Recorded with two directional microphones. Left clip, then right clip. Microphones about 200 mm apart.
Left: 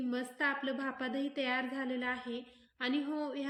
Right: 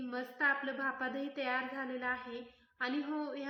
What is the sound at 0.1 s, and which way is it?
A woman's voice, 40° left (ahead or behind).